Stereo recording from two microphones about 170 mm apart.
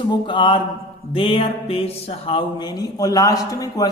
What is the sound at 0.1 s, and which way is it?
Music, 30° left (ahead or behind).